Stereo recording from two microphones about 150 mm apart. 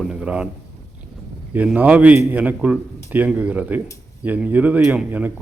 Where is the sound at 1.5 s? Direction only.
10° right (ahead or behind).